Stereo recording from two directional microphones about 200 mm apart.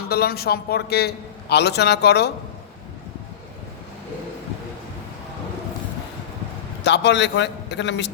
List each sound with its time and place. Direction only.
0.1 s a man's voice: 50° left (ahead or behind)
6.8 s a man's voice: 60° left (ahead or behind)